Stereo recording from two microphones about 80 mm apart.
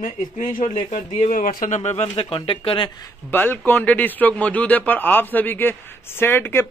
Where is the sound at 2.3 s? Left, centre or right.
Left.